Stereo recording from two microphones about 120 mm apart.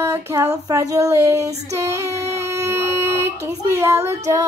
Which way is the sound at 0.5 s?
30° right (ahead or behind).